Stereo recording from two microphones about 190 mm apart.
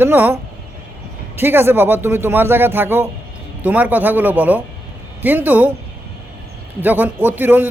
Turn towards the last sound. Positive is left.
turn(degrees=-10)  # may be behind; listen again after turning